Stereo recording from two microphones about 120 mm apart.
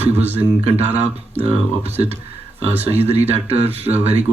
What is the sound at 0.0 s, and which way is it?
Speech, 60° right (ahead or behind).